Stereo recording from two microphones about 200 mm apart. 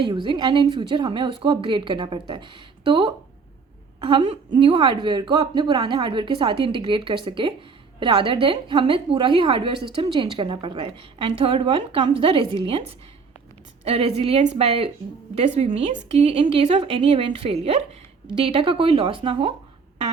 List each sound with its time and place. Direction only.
0.1 s a woman's voice: 25° right (ahead or behind)
13.8 s a woman's voice: 30° right (ahead or behind)